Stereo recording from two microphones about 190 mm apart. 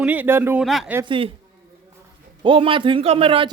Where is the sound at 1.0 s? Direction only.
25° right (ahead or behind).